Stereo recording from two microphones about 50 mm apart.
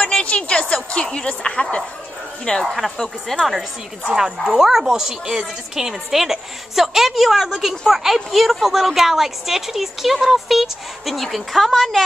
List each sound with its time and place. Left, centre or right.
0.0 s music: left
0.4 s speech: centre
2.6 s a woman's voice: centre
4.1 s a woman's voice: centre